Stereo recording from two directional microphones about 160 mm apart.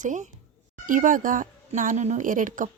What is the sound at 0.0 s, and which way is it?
Speech, 50° right (ahead or behind).